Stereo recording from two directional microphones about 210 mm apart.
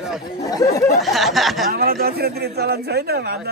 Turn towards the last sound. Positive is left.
turn(degrees=-50)  # may be behind; listen again after turning